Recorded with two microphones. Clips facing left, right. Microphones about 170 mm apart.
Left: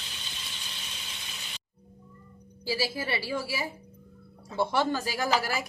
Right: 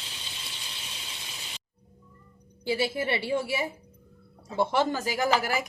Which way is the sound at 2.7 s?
25° right (ahead or behind).